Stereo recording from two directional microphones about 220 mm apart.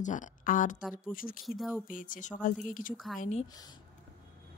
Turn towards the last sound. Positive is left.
turn(degrees=0)  # may be behind; listen again after turning